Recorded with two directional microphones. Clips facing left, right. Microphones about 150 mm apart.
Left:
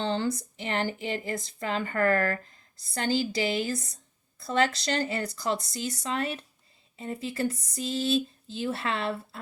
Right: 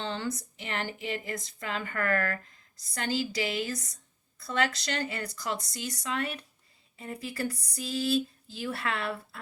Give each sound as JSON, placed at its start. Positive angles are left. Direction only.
{"t": 0.0, "sound": "speech", "side_deg": 30}